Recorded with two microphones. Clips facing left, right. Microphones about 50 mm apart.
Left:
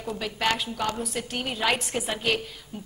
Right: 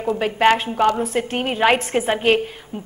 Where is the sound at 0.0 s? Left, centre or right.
Right.